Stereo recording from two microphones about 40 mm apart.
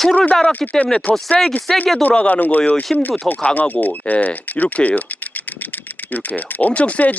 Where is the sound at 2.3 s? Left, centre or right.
Left.